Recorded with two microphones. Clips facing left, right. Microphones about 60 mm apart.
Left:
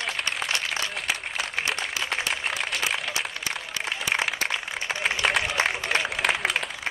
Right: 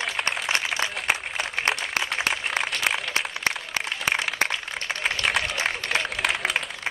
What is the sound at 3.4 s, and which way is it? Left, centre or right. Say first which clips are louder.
Applause: right 3 dB; right.